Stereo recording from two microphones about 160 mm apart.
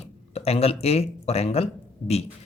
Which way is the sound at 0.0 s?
40° left (ahead or behind).